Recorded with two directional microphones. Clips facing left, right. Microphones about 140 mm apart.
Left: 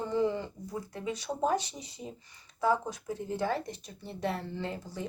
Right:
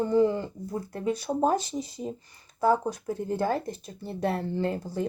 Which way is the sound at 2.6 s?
50° right (ahead or behind).